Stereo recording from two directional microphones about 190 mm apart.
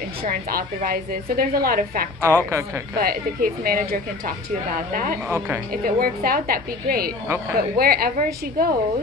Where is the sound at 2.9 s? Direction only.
50° right (ahead or behind).